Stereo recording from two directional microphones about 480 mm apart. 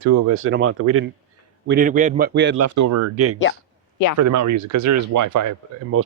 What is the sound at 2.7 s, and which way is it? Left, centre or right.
Speech, right.